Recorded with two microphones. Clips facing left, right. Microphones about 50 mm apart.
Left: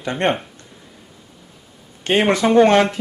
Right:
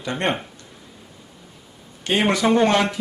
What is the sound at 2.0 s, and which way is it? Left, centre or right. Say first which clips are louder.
Speech: left 3 dB; left.